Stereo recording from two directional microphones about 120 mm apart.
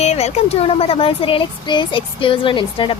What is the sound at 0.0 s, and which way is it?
Speech, 65° left (ahead or behind).